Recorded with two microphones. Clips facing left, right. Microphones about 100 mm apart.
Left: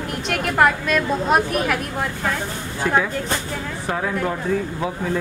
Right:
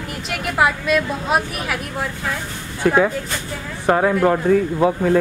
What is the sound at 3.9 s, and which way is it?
Speech, 60° right (ahead or behind).